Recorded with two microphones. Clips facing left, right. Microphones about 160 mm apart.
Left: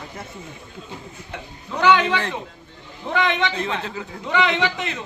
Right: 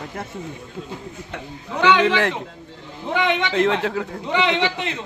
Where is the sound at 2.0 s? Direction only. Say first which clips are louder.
Right 5 dB; 75° right (ahead or behind).